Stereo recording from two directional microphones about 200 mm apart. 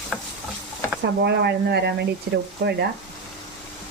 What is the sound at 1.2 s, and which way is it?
Speech, 60° right (ahead or behind).